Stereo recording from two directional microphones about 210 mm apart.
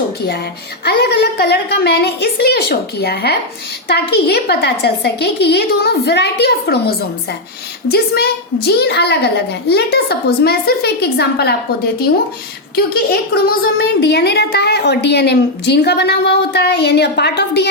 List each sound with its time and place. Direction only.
0.9 s a woman's voice: 50° left (ahead or behind)
12.7 s a woman's voice: 45° left (ahead or behind)